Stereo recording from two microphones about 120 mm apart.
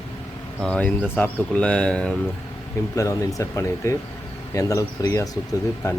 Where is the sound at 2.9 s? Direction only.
25° left (ahead or behind).